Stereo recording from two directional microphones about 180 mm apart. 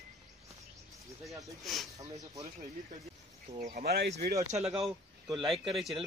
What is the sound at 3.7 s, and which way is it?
Speech, 55° right (ahead or behind).